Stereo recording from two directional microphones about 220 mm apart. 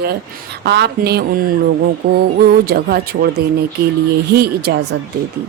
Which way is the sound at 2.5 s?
45° right (ahead or behind).